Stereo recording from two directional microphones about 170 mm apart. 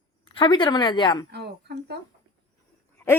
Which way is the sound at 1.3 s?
75° right (ahead or behind).